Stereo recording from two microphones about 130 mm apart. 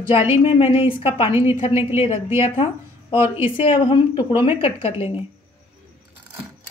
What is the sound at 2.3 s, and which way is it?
Speech, 45° left (ahead or behind).